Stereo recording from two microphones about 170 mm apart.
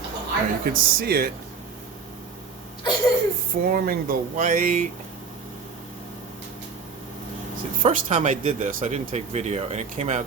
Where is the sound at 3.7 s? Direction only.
60° right (ahead or behind).